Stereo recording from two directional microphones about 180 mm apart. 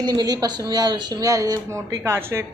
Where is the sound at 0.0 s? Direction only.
20° right (ahead or behind).